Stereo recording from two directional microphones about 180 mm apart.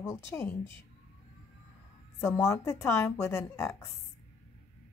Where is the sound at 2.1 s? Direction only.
15° left (ahead or behind).